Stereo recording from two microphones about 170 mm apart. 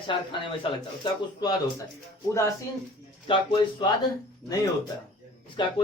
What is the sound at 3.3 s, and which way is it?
Speech, 30° left (ahead or behind).